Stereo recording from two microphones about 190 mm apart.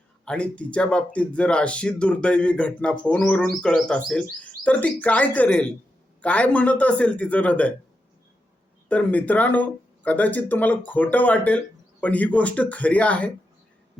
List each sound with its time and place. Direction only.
0.3 s speech: 5° left (ahead or behind)
8.9 s speech: 10° left (ahead or behind)